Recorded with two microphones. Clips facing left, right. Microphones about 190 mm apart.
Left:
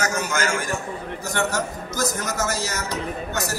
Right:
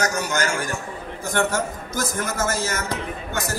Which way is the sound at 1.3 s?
50° right (ahead or behind).